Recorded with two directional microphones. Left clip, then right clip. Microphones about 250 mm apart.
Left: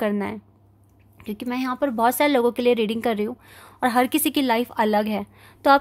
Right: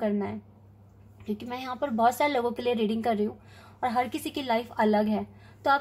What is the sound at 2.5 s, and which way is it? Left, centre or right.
A woman's voice, left.